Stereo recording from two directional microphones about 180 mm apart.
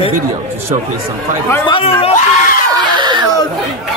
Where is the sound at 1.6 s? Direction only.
30° left (ahead or behind).